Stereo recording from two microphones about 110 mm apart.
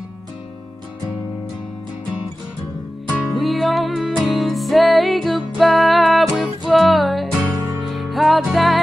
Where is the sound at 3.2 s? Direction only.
Centre (ahead or behind).